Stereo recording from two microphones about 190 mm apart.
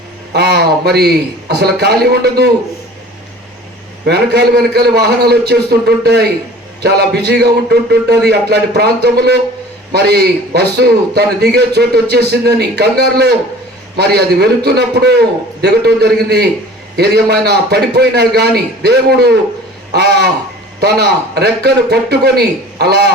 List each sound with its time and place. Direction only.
0.3 s a man's voice: 60° right (ahead or behind)
4.0 s a man's voice: 60° right (ahead or behind)